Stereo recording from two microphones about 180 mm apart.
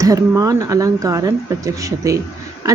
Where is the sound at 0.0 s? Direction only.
20° right (ahead or behind).